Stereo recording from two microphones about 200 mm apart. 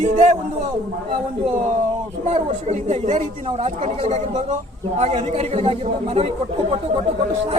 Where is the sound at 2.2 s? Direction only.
35° right (ahead or behind).